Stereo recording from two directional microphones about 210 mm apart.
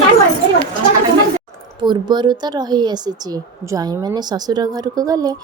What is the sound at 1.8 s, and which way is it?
A woman's voice, 20° right (ahead or behind).